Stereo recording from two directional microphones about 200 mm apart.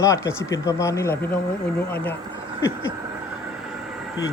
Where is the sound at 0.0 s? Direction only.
15° left (ahead or behind).